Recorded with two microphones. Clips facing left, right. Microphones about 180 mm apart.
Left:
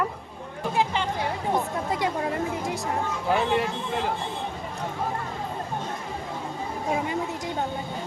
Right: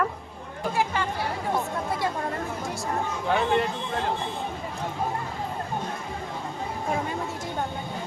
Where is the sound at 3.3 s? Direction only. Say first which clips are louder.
Even; 5° left (ahead or behind).